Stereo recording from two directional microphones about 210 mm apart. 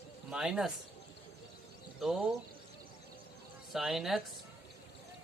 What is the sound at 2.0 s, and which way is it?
Speech, centre (ahead or behind).